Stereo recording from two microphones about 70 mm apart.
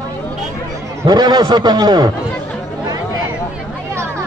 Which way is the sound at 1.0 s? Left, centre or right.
Right.